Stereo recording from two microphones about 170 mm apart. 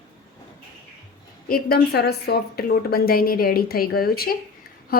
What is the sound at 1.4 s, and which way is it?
A woman's voice, 65° left (ahead or behind).